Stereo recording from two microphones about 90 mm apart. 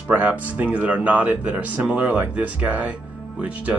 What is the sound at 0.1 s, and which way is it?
Speech, 20° right (ahead or behind).